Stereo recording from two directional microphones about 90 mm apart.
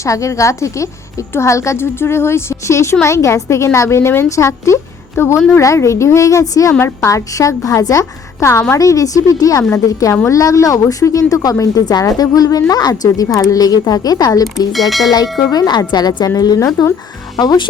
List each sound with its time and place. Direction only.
0.0 s a woman's voice: 35° left (ahead or behind)
6.7 s a woman's voice: 30° left (ahead or behind)
14.7 s speech: centre (ahead or behind)
15.4 s speech: 50° left (ahead or behind)
17.3 s speech: 55° left (ahead or behind)